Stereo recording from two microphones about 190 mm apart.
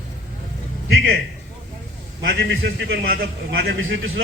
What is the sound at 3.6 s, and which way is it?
Speech, 90° right.